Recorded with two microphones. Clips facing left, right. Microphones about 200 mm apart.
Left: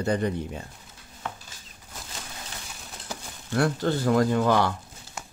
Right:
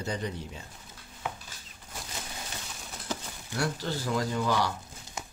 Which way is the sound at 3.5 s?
55° left (ahead or behind).